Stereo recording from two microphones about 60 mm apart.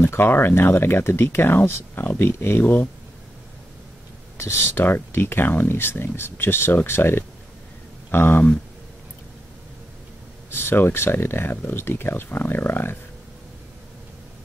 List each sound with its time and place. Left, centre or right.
0.0 s speech: left
4.4 s speech: left
10.5 s speech: left